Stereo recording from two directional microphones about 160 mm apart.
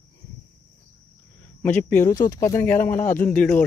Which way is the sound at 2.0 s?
25° left (ahead or behind).